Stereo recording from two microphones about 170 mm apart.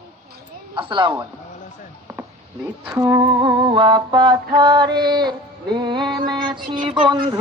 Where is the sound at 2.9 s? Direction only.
20° right (ahead or behind).